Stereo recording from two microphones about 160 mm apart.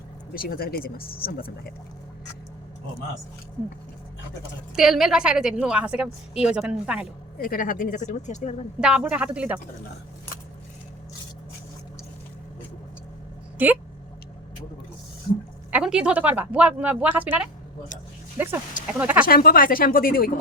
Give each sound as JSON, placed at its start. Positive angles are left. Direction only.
{"t": 0.3, "sound": "speech", "side_deg": 65}
{"t": 4.7, "sound": "a woman's voice", "side_deg": 0}
{"t": 7.3, "sound": "speech", "side_deg": 65}
{"t": 8.8, "sound": "speech", "side_deg": -5}
{"t": 13.6, "sound": "speech", "side_deg": -10}
{"t": 15.7, "sound": "speech", "side_deg": -5}
{"t": 18.9, "sound": "speech", "side_deg": -10}
{"t": 19.2, "sound": "speech", "side_deg": 65}